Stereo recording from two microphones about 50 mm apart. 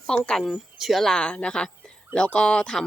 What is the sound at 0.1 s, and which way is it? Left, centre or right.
Speech, left.